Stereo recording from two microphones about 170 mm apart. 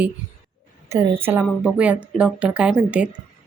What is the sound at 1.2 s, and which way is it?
Speech, 10° right (ahead or behind).